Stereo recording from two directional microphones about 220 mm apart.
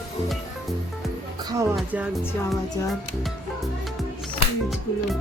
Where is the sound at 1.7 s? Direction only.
5° right (ahead or behind).